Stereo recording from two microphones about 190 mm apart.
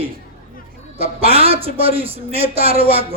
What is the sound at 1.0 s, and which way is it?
A man's voice, 30° right (ahead or behind).